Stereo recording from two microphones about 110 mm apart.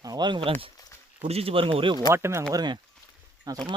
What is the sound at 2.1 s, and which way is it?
Speech, 25° right (ahead or behind).